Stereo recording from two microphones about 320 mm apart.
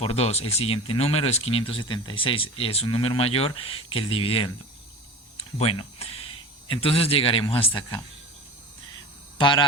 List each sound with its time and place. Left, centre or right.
0.0 s speech: centre
5.5 s speech: centre
9.4 s speech: centre